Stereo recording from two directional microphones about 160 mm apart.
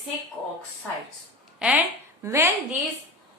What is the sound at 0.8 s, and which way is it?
Speech, 10° left (ahead or behind).